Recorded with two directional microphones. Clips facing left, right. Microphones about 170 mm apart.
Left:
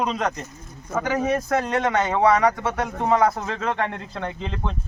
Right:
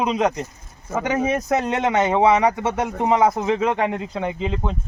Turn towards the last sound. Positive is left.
turn(degrees=-10)  # may be behind; listen again after turning